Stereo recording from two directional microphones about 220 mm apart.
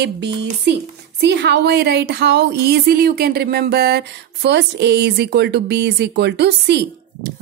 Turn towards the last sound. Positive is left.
turn(degrees=-50)  # may be behind; listen again after turning